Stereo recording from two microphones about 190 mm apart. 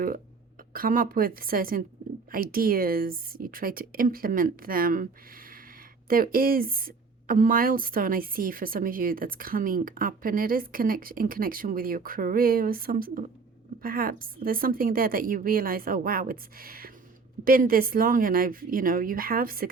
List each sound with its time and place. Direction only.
0.7 s a woman's voice: 50° right (ahead or behind)
6.1 s a woman's voice: 50° right (ahead or behind)